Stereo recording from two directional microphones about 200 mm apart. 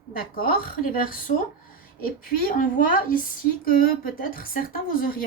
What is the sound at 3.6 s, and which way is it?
A woman's voice, 45° left (ahead or behind).